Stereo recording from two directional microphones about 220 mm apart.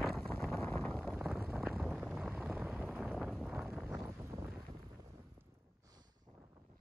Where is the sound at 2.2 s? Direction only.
5° right (ahead or behind).